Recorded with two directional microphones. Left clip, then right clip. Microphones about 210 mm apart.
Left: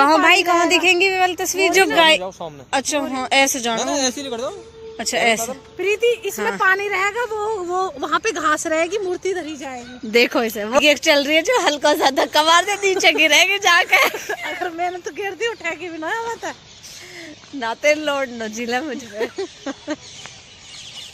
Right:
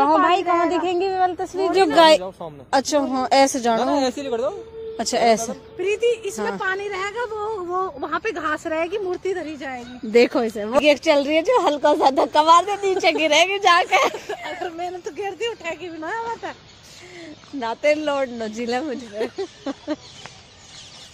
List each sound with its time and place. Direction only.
0.5 s speech: 45° left (ahead or behind)
0.8 s speech: 15° left (ahead or behind)
2.0 s a woman's voice: 10° right (ahead or behind)
3.7 s speech: 40° left (ahead or behind)
4.9 s a woman's voice: 15° right (ahead or behind)
5.4 s a woman's voice: 25° left (ahead or behind); by 9.8 s 50° left (ahead or behind)
10.1 s a woman's voice: centre (ahead or behind)
14.1 s a woman's voice: 25° left (ahead or behind)
15.0 s speech: 5° left (ahead or behind)
16.0 s speech: 40° left (ahead or behind)
17.6 s a woman's voice: centre (ahead or behind)
19.1 s speech: 35° left (ahead or behind)
19.6 s a woman's voice: centre (ahead or behind)